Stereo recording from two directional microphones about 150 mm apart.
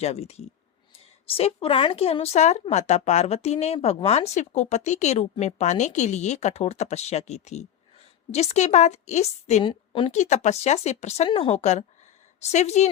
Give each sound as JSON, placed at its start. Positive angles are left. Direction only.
{"t": 0.0, "sound": "a woman's voice", "side_deg": 45}
{"t": 9.6, "sound": "a woman's voice", "side_deg": 35}
{"t": 10.1, "sound": "a woman's voice", "side_deg": 50}